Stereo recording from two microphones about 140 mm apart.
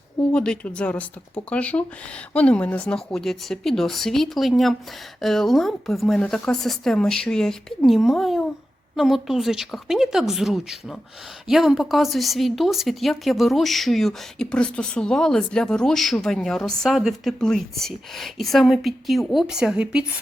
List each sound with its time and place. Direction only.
0.2 s speech: 5° left (ahead or behind); by 20.2 s 10° right (ahead or behind)